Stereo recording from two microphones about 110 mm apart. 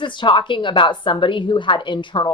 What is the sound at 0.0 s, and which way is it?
A woman's voice, 45° left (ahead or behind).